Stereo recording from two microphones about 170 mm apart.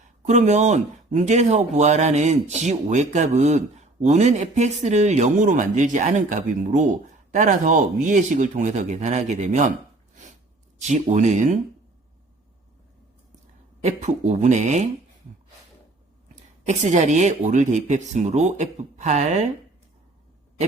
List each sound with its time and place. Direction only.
0.3 s speech: 45° right (ahead or behind)
10.8 s speech: 45° right (ahead or behind)
13.8 s speech: 40° right (ahead or behind)
16.3 s speech: 45° right (ahead or behind)